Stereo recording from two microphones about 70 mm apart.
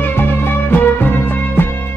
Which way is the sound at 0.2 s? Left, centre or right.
Left.